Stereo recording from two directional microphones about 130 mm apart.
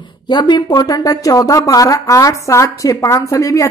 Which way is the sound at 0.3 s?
35° left (ahead or behind).